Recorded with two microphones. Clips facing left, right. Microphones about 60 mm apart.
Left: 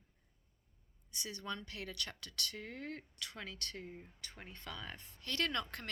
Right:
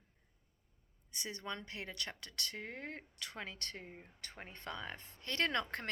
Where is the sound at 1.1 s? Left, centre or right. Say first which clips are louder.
Even; right.